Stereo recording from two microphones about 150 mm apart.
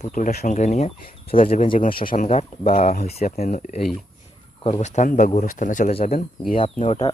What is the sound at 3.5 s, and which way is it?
Speech, 60° left (ahead or behind).